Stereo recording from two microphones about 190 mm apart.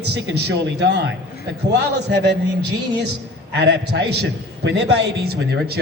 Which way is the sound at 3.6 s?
60° right (ahead or behind).